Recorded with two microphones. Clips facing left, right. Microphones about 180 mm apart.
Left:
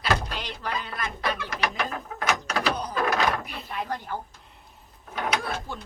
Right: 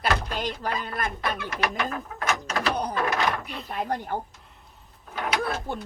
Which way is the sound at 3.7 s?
50° right (ahead or behind).